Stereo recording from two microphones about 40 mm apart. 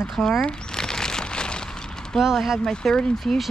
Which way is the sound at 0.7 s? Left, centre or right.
Centre.